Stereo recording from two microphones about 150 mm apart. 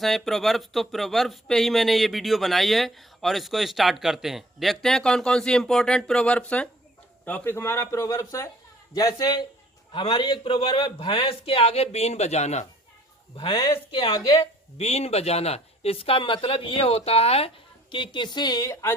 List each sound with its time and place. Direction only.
0.0 s speech: centre (ahead or behind); by 12.6 s 50° left (ahead or behind)
13.3 s speech: 35° left (ahead or behind)
17.9 s speech: 30° left (ahead or behind)